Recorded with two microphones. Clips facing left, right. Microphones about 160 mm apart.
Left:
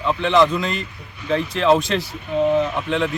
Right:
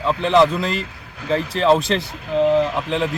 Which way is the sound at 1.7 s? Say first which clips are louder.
Even; centre (ahead or behind).